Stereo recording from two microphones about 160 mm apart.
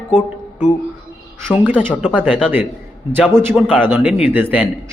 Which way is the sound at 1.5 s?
10° right (ahead or behind).